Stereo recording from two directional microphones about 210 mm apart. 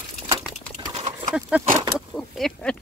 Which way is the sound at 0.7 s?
25° right (ahead or behind).